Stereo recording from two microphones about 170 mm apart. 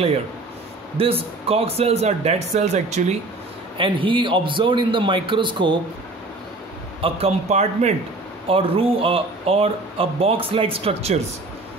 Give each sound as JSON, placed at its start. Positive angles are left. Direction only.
{"t": 0.9, "sound": "speech", "side_deg": -35}
{"t": 3.7, "sound": "a man's voice", "side_deg": -30}
{"t": 7.0, "sound": "speech", "side_deg": -35}